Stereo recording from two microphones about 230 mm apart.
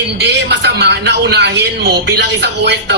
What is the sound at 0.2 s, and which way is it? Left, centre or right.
A man's voice, right.